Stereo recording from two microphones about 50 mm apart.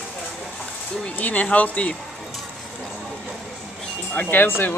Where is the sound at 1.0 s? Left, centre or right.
Left.